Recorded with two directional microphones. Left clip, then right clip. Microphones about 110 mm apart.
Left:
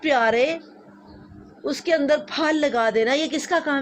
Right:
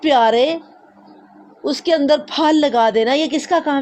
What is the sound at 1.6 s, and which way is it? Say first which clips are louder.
A woman's voice: right 5 dB; 30° right (ahead or behind).